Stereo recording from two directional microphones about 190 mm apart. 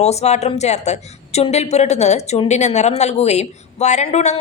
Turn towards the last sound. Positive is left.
turn(degrees=35)  # may be behind; listen again after turning